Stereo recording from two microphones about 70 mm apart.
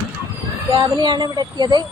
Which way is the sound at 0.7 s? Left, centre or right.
Right.